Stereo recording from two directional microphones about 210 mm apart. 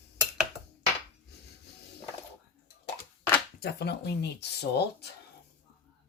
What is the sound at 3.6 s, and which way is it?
Speech, 50° left (ahead or behind).